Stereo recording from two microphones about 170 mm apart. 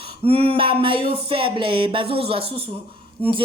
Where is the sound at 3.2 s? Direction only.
10° left (ahead or behind).